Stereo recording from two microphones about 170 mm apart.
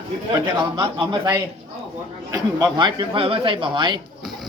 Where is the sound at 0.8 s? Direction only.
30° right (ahead or behind).